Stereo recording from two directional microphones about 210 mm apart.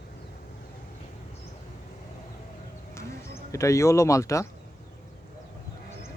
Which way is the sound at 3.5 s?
15° left (ahead or behind).